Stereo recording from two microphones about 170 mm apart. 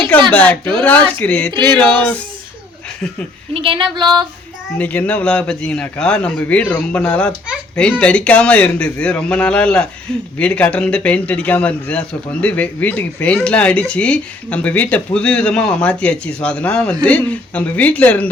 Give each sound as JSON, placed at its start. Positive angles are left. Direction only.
{"t": 0.3, "sound": "a man's voice", "side_deg": 10}
{"t": 3.5, "sound": "a sound", "side_deg": -30}
{"t": 4.8, "sound": "a man's voice", "side_deg": 10}